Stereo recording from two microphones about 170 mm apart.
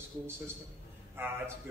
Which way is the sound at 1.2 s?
15° right (ahead or behind).